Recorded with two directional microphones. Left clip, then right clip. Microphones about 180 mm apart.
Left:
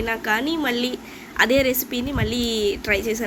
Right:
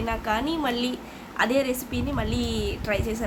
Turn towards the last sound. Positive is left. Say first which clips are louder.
# left 6 dB
turn(degrees=15)  # may be behind; listen again after turning